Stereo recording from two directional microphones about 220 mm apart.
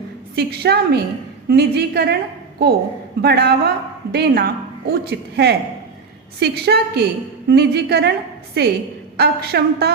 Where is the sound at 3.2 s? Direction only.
45° right (ahead or behind).